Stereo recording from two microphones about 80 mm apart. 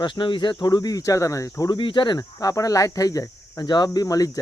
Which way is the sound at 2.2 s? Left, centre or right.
Left.